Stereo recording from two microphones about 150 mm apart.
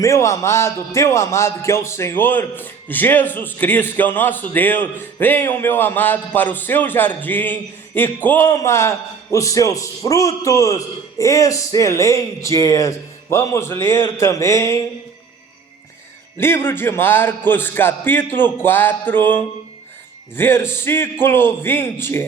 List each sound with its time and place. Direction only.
0.0 s speech: 20° left (ahead or behind)
16.4 s speech: 15° left (ahead or behind)